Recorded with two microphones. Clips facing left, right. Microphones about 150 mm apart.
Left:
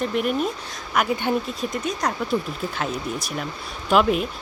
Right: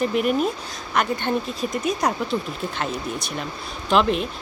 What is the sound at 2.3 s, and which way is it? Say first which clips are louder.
A woman's voice: left 1 dB; 5° left (ahead or behind).